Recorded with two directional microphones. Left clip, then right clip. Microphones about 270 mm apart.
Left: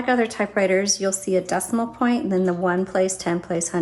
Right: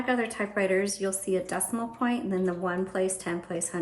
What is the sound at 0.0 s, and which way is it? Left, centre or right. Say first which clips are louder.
A woman's voice: left 7 dB; centre.